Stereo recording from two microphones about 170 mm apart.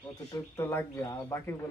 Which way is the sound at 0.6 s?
15° left (ahead or behind).